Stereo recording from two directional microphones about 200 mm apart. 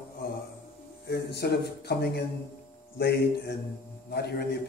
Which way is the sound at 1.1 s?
55° left (ahead or behind).